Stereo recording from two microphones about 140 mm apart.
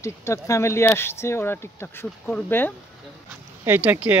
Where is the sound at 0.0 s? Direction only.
20° left (ahead or behind).